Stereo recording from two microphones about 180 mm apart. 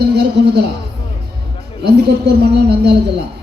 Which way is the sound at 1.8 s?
65° right (ahead or behind).